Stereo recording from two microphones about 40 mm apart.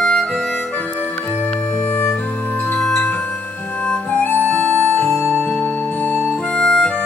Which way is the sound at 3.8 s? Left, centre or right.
Left.